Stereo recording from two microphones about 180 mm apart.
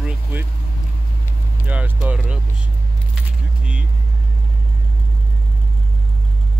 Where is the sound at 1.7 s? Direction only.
5° right (ahead or behind).